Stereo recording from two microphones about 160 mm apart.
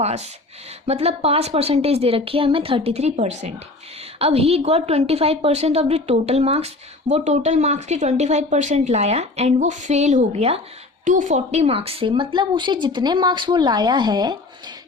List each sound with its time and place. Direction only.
0.0 s speech: 45° right (ahead or behind); by 14.3 s 25° right (ahead or behind)